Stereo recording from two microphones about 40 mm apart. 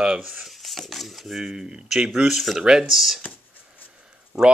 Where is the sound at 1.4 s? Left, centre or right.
Centre.